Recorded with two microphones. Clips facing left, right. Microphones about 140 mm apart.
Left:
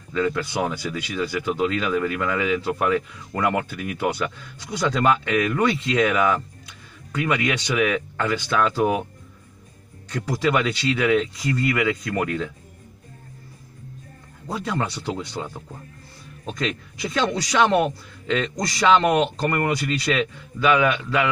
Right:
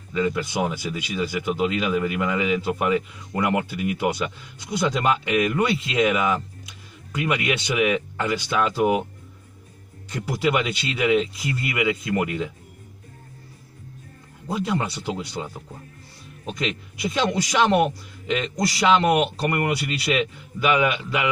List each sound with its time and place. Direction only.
0.1 s speech: 10° right (ahead or behind)
10.1 s speech: 15° right (ahead or behind)
14.5 s speech: 15° right (ahead or behind)
16.5 s speech: 15° right (ahead or behind)